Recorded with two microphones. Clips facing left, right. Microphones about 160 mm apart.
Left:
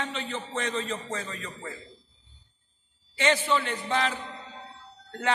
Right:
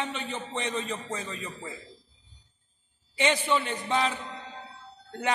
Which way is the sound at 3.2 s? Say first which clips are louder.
Left 1 dB; 15° right (ahead or behind).